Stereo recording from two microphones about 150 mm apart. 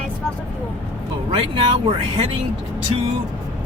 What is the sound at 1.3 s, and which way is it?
Speech, 35° right (ahead or behind).